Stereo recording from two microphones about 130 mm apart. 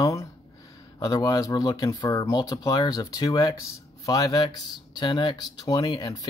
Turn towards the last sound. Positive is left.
turn(degrees=30)  # may be behind; listen again after turning